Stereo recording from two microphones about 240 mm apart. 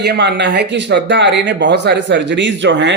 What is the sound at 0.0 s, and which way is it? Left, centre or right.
Speech, right.